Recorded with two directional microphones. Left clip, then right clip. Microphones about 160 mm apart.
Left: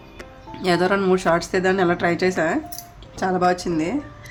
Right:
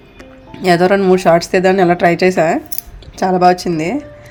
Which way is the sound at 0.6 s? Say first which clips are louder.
Right 8 dB; 30° right (ahead or behind).